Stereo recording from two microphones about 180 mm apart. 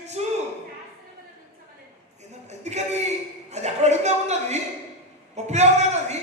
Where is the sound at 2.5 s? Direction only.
40° right (ahead or behind).